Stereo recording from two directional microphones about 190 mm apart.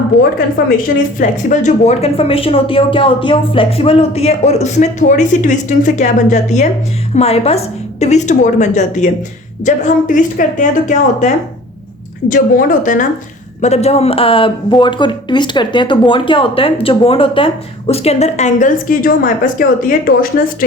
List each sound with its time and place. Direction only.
1.5 s speech: 35° left (ahead or behind)
12.3 s speech: 45° left (ahead or behind)